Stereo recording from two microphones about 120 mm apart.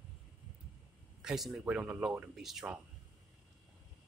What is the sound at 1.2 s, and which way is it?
Speech, 5° right (ahead or behind).